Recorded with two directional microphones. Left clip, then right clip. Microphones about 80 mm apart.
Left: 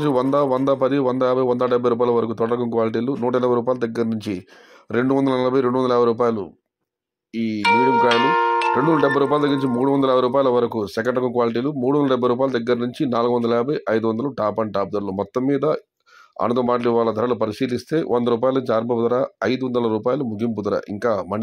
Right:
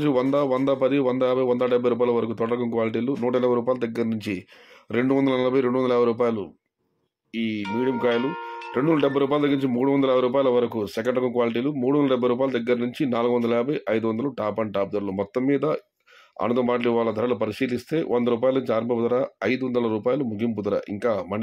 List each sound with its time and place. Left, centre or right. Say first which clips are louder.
0.0 s speech: left 3 dB; left